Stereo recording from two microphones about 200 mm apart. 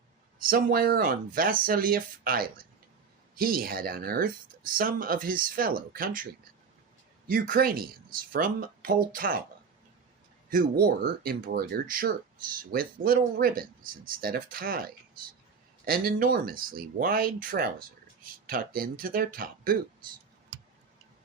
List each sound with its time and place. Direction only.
0.3 s speech: 45° right (ahead or behind)
7.3 s speech: 45° right (ahead or behind)
10.5 s speech: 45° right (ahead or behind)
20.5 s tick-tock: 65° right (ahead or behind)